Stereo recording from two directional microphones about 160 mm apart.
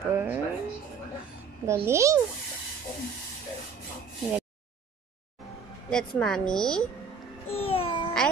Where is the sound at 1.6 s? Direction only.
15° right (ahead or behind).